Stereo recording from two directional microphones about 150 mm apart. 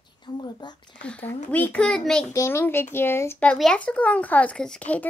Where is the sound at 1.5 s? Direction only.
10° left (ahead or behind).